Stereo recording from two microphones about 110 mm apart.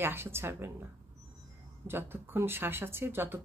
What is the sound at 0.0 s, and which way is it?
Speech, 20° right (ahead or behind).